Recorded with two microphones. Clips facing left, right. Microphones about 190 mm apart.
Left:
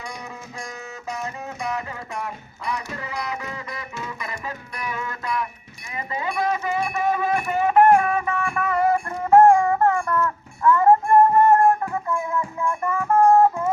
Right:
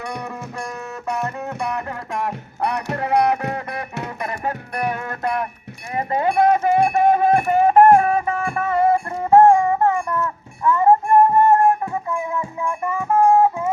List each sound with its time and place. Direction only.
0.0 s music: 65° right (ahead or behind); by 13.7 s 10° right (ahead or behind)